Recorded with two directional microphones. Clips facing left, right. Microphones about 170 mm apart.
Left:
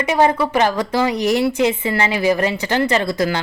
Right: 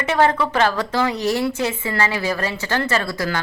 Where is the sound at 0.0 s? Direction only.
15° left (ahead or behind).